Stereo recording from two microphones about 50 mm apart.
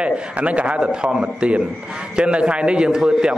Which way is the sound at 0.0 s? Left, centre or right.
Right.